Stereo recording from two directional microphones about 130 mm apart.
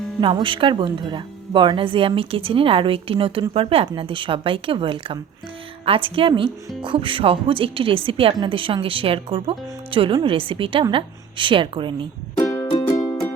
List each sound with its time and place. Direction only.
0.2 s a woman's voice: 40° right (ahead or behind)
12.4 s music: 25° left (ahead or behind)